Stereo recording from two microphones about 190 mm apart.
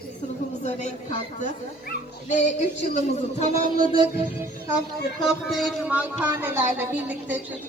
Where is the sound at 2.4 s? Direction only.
40° left (ahead or behind).